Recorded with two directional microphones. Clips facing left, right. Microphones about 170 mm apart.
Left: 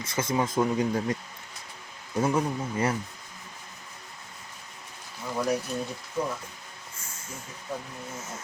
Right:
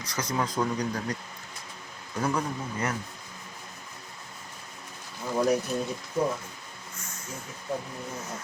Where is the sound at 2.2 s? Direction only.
25° left (ahead or behind).